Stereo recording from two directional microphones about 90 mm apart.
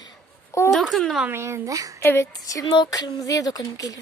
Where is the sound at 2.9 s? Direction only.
40° left (ahead or behind).